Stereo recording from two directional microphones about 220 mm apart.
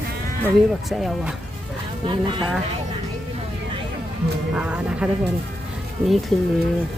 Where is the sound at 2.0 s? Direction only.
20° right (ahead or behind).